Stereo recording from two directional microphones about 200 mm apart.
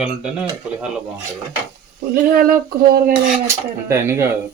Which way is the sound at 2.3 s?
45° right (ahead or behind).